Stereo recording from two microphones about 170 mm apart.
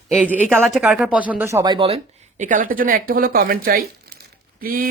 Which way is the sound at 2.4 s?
50° right (ahead or behind).